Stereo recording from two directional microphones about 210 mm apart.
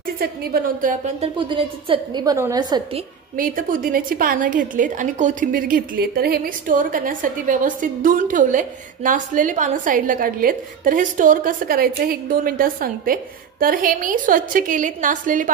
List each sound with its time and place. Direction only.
0.2 s a woman's voice: 45° right (ahead or behind); by 3.0 s 20° right (ahead or behind)
3.3 s a woman's voice: 40° right (ahead or behind)